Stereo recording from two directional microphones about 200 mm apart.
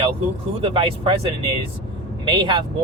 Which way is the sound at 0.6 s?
25° right (ahead or behind).